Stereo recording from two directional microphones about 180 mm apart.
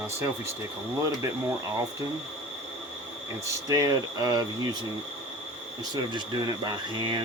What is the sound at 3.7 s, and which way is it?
Speech, 20° right (ahead or behind).